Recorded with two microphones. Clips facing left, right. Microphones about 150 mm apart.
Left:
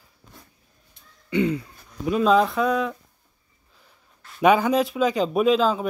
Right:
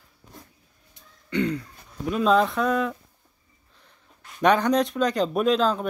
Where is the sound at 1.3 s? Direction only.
5° left (ahead or behind).